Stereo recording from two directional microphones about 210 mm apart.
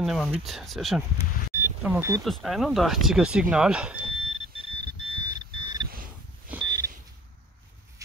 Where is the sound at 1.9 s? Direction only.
10° right (ahead or behind).